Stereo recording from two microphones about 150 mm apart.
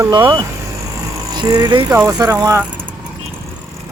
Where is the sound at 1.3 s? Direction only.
30° right (ahead or behind).